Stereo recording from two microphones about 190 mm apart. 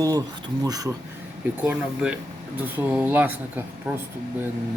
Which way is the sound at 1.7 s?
5° right (ahead or behind).